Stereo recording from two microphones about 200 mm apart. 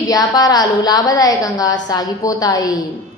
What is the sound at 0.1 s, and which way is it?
A woman's voice, 20° left (ahead or behind).